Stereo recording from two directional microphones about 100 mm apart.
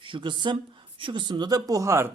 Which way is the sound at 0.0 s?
55° right (ahead or behind).